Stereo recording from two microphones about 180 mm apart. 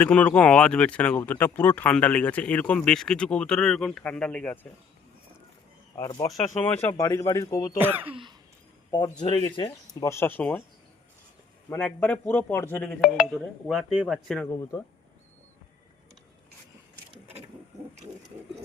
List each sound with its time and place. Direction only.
0.0 s speech: 10° left (ahead or behind)
6.0 s speech: 20° left (ahead or behind)
6.3 s speech: 10° left (ahead or behind)
8.0 s cough: 30° right (ahead or behind)
8.9 s speech: 25° left (ahead or behind)
11.7 s speech: 10° left (ahead or behind)
13.0 s speech: 5° right (ahead or behind)